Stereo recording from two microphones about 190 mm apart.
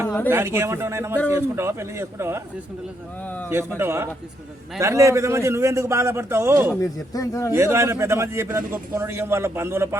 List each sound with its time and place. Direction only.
0.3 s speech: 15° right (ahead or behind)
3.8 s speech: 15° right (ahead or behind)
7.1 s a man's voice: 20° left (ahead or behind)
7.5 s speech: 15° right (ahead or behind)